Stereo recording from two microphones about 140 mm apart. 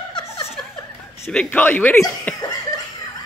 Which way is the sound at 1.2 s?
10° left (ahead or behind).